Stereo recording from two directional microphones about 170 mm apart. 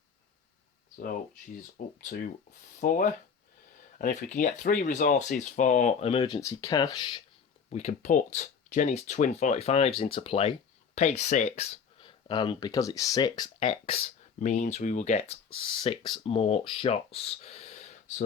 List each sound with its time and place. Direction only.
1.8 s speech: 55° left (ahead or behind); by 7.2 s 25° left (ahead or behind)
7.7 s speech: 40° left (ahead or behind)
14.3 s speech: 45° left (ahead or behind)